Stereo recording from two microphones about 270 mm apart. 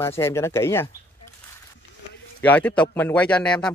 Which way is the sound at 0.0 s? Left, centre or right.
Centre.